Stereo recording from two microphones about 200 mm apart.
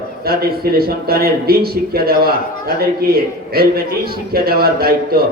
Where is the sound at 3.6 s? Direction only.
50° right (ahead or behind).